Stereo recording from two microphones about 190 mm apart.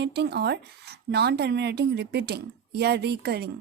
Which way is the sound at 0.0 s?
65° right (ahead or behind).